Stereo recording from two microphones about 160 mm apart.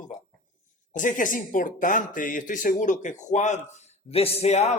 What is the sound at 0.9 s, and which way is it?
Speech, 55° left (ahead or behind).